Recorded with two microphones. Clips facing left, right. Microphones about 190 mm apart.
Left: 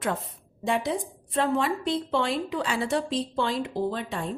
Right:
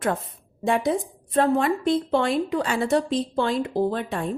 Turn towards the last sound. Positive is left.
turn(degrees=-55)  # may be behind; listen again after turning